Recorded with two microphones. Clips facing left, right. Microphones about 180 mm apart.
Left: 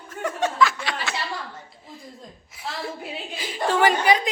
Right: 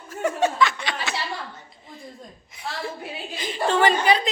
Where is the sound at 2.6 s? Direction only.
5° left (ahead or behind).